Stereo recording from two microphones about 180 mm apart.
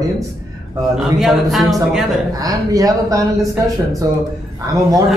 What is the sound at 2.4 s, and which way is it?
Speech, 20° right (ahead or behind).